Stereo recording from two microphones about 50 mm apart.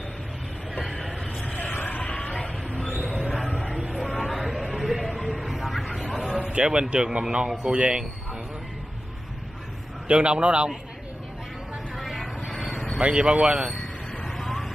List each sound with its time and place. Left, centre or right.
1.4 s vehicle: left
2.0 s a sound: left
3.1 s a sound: centre
4.1 s a sound: centre
6.4 s speech: right
10.0 s speech: right
12.0 s vehicle: centre
13.0 s speech: right
13.6 s speech: centre
14.2 s vehicle: centre